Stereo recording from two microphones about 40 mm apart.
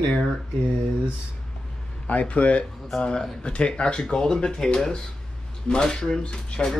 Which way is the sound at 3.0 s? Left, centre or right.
Left.